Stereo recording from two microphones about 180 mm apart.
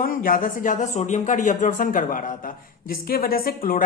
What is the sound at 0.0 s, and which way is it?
A woman's voice, 50° left (ahead or behind).